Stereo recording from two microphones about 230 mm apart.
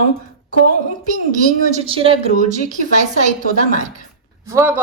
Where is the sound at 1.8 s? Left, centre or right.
Right.